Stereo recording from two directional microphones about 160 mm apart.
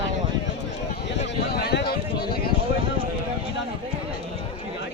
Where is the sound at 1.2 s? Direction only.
90° left; by 2.4 s 75° left (ahead or behind).